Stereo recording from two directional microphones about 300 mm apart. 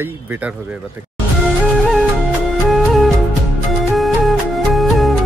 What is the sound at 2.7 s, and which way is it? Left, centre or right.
Music, centre.